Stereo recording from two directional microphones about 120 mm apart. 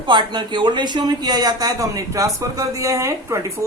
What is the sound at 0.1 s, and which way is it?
Speech, 40° right (ahead or behind).